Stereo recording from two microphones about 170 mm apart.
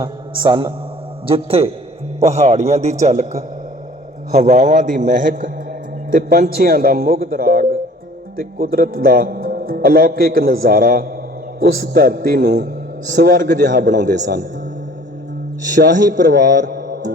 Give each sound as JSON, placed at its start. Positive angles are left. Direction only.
{"t": 0.0, "sound": "a man's voice", "side_deg": -25}
{"t": 6.1, "sound": "a man's voice", "side_deg": -60}
{"t": 14.0, "sound": "a man's voice", "side_deg": -50}
{"t": 15.7, "sound": "a man's voice", "side_deg": -50}